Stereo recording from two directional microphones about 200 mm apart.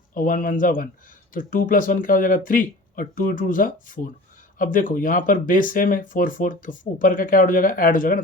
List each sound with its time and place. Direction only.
0.1 s speech: 45° left (ahead or behind)